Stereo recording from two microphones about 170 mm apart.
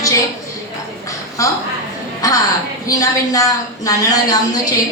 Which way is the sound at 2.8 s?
20° left (ahead or behind).